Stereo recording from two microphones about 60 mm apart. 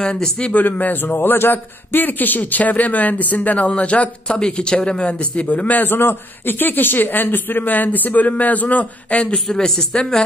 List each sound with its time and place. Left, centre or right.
0.0 s a man's voice: centre
9.2 s speech: centre